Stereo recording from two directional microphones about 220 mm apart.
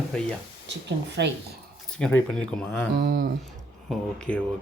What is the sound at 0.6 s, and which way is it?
Speech, 50° right (ahead or behind).